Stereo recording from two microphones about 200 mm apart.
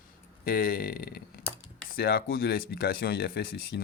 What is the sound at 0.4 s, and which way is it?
Speech, 45° left (ahead or behind).